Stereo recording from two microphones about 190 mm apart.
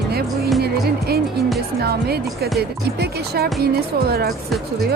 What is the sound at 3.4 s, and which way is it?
Speech, 55° right (ahead or behind).